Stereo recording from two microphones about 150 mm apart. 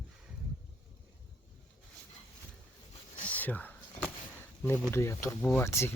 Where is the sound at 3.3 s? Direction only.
10° left (ahead or behind).